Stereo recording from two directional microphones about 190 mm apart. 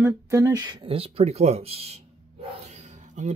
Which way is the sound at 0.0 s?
15° right (ahead or behind).